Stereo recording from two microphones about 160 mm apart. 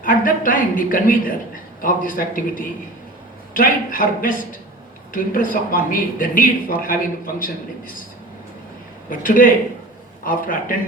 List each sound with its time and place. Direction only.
0.0 s a man's voice: 60° left (ahead or behind)
9.0 s a man's voice: 60° left (ahead or behind)